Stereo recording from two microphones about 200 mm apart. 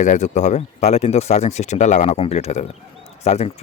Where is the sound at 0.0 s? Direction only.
35° left (ahead or behind).